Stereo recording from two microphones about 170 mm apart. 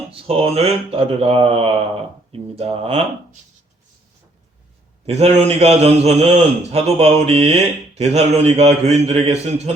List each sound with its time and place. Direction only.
0.1 s a man's voice: 35° right (ahead or behind)
5.0 s a man's voice: 40° right (ahead or behind)